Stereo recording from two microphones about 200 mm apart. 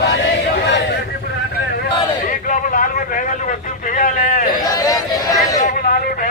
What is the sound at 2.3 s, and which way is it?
Vehicle, 40° left (ahead or behind).